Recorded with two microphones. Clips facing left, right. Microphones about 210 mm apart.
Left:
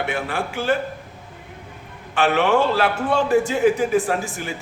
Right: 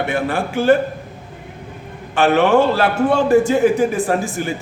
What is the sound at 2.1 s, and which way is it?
A man's voice, 50° right (ahead or behind).